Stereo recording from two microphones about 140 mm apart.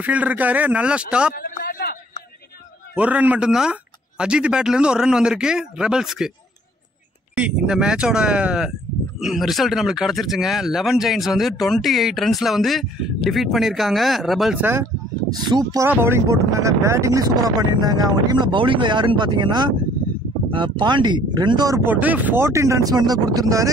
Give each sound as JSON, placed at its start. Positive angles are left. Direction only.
{"t": 0.0, "sound": "speech", "side_deg": -10}
{"t": 1.3, "sound": "a sound", "side_deg": 90}
{"t": 3.0, "sound": "speech", "side_deg": -10}
{"t": 7.3, "sound": "speech", "side_deg": -10}
{"t": 14.6, "sound": "speech", "side_deg": -15}
{"t": 15.4, "sound": "speech", "side_deg": -30}
{"t": 15.9, "sound": "speech", "side_deg": -15}
{"t": 21.8, "sound": "speech", "side_deg": -10}